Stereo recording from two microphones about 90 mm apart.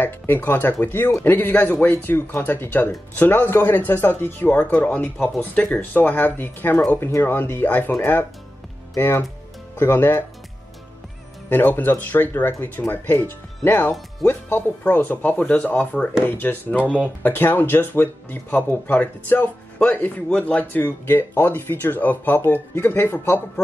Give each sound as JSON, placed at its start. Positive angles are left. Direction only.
{"t": 0.0, "sound": "speech", "side_deg": 20}
{"t": 11.4, "sound": "speech", "side_deg": 25}